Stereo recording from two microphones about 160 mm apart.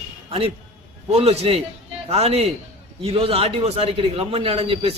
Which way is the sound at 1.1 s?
40° right (ahead or behind).